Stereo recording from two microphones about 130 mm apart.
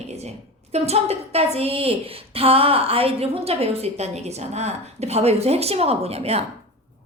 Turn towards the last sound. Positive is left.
turn(degrees=-55)  # may be behind; listen again after turning